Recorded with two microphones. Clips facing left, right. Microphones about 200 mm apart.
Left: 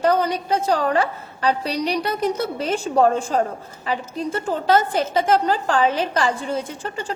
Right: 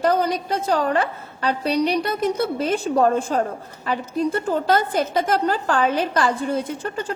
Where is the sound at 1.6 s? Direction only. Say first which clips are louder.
Right 3 dB; 55° right (ahead or behind).